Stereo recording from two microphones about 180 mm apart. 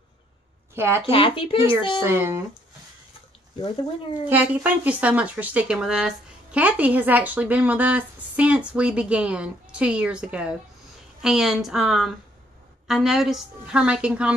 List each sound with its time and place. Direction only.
0.7 s speech: 15° right (ahead or behind)
1.0 s speech: 30° left (ahead or behind)
2.0 s speech: 15° right (ahead or behind)
4.3 s a woman's voice: 10° right (ahead or behind)